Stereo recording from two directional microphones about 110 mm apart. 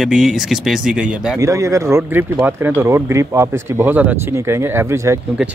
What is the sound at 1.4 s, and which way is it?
Speech, 30° right (ahead or behind).